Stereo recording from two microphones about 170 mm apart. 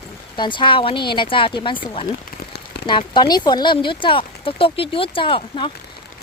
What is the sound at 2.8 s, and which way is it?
Speech, 30° left (ahead or behind).